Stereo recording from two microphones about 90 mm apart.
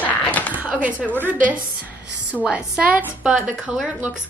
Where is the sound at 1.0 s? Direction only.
15° left (ahead or behind).